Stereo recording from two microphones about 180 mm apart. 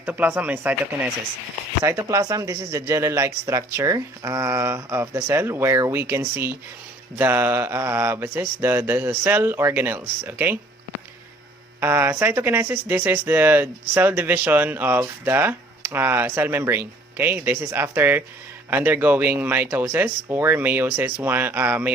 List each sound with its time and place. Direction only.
0.0 s speech: 10° right (ahead or behind)
11.8 s speech: 10° right (ahead or behind)